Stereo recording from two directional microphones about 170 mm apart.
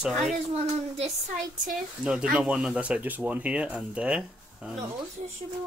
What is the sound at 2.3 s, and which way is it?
Speech, 5° right (ahead or behind).